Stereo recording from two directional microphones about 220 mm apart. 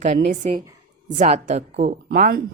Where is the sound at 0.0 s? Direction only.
35° right (ahead or behind).